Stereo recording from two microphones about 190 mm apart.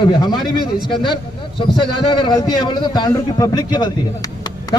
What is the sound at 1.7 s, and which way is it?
A man's voice, 25° left (ahead or behind).